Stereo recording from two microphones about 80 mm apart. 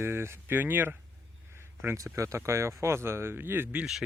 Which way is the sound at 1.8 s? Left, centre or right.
Right.